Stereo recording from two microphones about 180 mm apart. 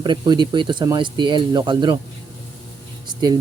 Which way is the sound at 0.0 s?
25° right (ahead or behind).